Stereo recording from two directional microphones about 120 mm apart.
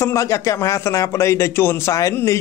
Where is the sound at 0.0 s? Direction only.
25° left (ahead or behind).